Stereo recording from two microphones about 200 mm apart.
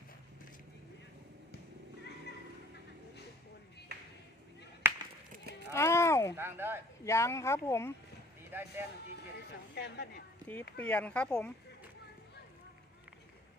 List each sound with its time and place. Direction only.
4.8 s chop: 10° right (ahead or behind)
5.7 s a sound: 15° left (ahead or behind)
6.3 s speech: 10° right (ahead or behind)
7.0 s speech: 15° left (ahead or behind)
8.5 s speech: 10° right (ahead or behind)
9.7 s speech: 55° left (ahead or behind)
10.8 s speech: 5° left (ahead or behind)